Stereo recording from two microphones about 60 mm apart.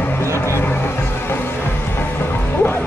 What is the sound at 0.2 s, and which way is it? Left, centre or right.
Music, left.